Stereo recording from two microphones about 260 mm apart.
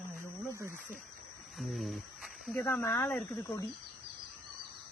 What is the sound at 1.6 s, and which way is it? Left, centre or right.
Speech, centre.